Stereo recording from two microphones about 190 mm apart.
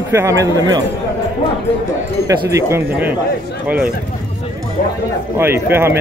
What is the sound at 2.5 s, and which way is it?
Speech, 15° right (ahead or behind).